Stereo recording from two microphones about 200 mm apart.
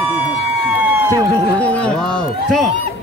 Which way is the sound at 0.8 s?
15° right (ahead or behind).